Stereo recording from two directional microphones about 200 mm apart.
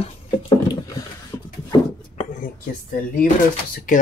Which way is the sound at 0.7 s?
20° left (ahead or behind).